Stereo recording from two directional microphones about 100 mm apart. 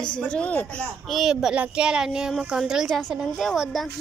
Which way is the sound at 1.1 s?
5° right (ahead or behind).